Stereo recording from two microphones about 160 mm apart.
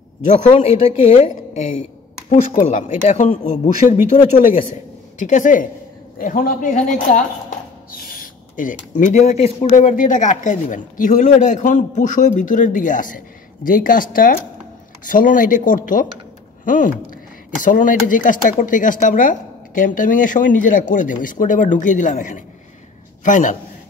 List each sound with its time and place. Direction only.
0.6 s speech: 40° left (ahead or behind)
5.2 s speech: 50° left (ahead or behind)